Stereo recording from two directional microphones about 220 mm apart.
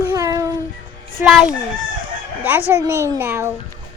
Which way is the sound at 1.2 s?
Centre (ahead or behind).